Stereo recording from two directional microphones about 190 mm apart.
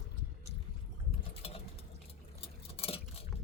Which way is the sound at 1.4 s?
30° left (ahead or behind).